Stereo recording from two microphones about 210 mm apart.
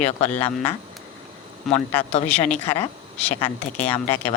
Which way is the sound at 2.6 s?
30° left (ahead or behind).